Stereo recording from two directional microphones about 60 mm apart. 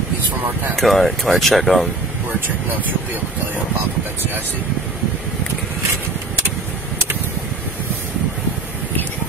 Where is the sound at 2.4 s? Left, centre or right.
Right.